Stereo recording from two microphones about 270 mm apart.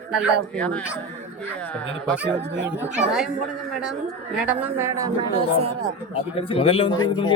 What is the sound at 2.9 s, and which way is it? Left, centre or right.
Speech, centre.